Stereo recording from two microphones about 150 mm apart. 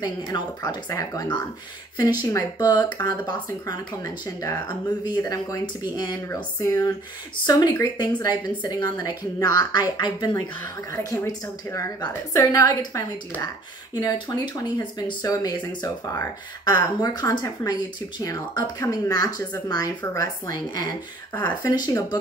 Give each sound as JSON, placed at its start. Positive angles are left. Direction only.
{"t": 0.0, "sound": "speech", "side_deg": 25}